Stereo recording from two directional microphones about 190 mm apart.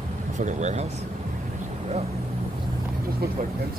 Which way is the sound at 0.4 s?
40° right (ahead or behind).